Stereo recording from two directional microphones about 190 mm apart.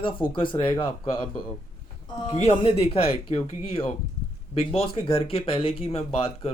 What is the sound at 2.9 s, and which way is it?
Speech, 30° left (ahead or behind).